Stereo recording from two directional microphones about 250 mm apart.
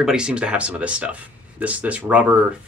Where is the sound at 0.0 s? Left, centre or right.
Centre.